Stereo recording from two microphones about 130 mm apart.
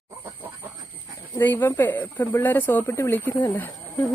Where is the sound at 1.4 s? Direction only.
15° left (ahead or behind).